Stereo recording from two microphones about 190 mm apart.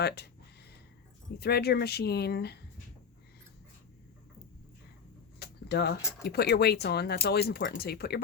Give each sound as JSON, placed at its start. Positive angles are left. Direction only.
{"t": 1.4, "sound": "speech", "side_deg": 55}
{"t": 5.4, "sound": "a sound", "side_deg": 60}
{"t": 6.0, "sound": "speech", "side_deg": 15}
{"t": 6.2, "sound": "speech", "side_deg": 60}